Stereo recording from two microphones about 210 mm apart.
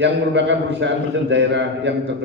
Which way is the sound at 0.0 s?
55° right (ahead or behind).